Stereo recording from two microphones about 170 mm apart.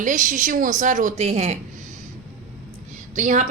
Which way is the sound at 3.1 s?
45° right (ahead or behind).